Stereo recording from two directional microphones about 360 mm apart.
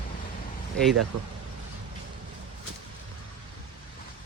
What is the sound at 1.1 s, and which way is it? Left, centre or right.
Speech, right.